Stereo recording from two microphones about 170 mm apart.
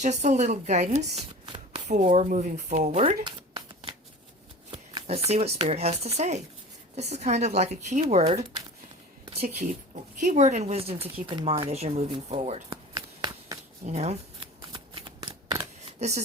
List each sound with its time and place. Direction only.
0.0 s speech: 45° right (ahead or behind)
2.0 s speech: 40° right (ahead or behind)
3.2 s a sound: 25° right (ahead or behind)
4.7 s shuffling cards: 35° right (ahead or behind)
5.3 s a woman's voice: 35° right (ahead or behind)
12.9 s a sound: 20° right (ahead or behind)
13.8 s shuffling cards: 40° right (ahead or behind); by 15.6 s 20° right (ahead or behind)
16.0 s speech: 40° right (ahead or behind)